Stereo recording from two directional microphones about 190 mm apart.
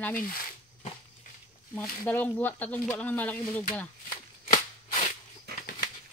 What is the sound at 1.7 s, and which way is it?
Speech, 10° left (ahead or behind).